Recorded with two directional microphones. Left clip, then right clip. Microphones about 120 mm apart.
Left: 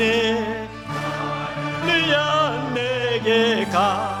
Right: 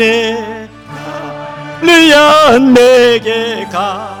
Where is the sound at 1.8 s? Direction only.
55° right (ahead or behind).